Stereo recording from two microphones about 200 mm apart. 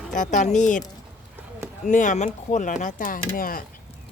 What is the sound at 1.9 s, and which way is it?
A woman's voice, 40° left (ahead or behind).